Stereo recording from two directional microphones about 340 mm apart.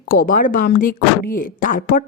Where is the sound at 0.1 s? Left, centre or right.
Left.